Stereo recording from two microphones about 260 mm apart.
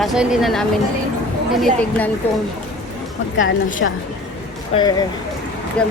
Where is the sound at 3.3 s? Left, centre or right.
Left.